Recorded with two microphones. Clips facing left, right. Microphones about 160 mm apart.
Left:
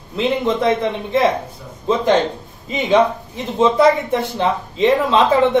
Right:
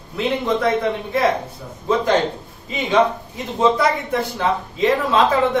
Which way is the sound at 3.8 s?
25° left (ahead or behind).